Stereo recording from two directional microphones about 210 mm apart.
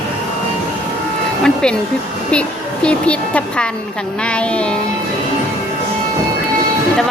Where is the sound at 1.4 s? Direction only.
5° left (ahead or behind).